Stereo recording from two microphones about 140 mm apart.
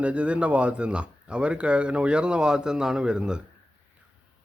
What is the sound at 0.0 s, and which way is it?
Speech, 10° right (ahead or behind).